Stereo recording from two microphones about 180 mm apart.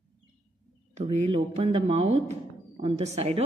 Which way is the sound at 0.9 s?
35° right (ahead or behind).